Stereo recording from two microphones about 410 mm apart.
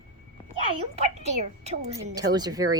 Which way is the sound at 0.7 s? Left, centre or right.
Centre.